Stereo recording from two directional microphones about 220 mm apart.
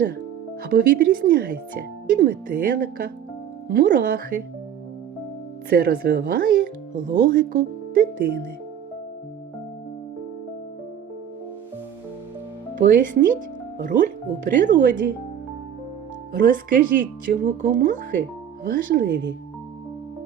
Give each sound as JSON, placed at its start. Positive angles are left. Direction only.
{"t": 0.6, "sound": "speech", "side_deg": -40}
{"t": 5.6, "sound": "speech", "side_deg": -40}
{"t": 12.7, "sound": "speech", "side_deg": -35}
{"t": 16.3, "sound": "speech", "side_deg": -40}